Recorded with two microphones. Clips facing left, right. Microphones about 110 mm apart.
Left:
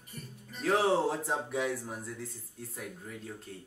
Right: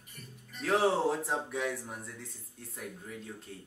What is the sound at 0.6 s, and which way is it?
Speech, centre (ahead or behind).